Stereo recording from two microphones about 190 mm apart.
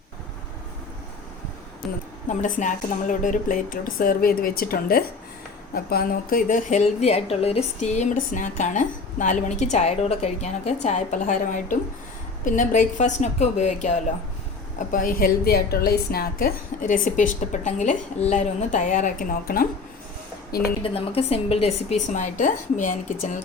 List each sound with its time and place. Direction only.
2.2 s a woman's voice: 40° left (ahead or behind)
14.9 s a woman's voice: 50° left (ahead or behind)
20.8 s a woman's voice: 30° left (ahead or behind)